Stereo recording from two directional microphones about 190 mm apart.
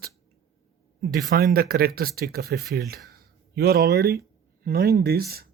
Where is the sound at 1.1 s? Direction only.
50° right (ahead or behind).